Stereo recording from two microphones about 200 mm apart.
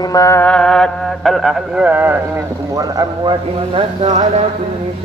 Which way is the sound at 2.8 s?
20° right (ahead or behind).